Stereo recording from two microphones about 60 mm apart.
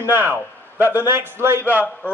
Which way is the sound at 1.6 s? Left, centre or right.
Left.